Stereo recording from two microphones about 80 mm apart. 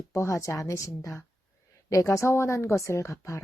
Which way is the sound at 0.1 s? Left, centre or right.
Left.